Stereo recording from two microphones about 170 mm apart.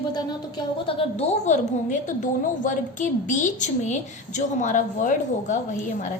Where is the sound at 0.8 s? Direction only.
40° left (ahead or behind).